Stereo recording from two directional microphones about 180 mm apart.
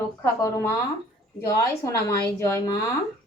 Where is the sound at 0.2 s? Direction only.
15° left (ahead or behind).